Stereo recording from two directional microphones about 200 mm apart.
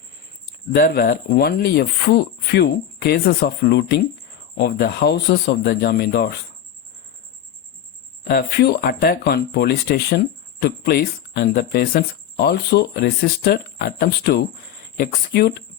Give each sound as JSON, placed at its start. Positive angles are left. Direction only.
{"t": 0.7, "sound": "speech", "side_deg": 50}
{"t": 8.2, "sound": "speech", "side_deg": 50}